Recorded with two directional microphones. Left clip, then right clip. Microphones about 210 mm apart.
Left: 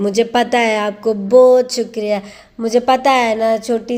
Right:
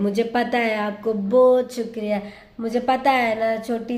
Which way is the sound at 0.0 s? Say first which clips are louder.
Left 7 dB; 30° left (ahead or behind).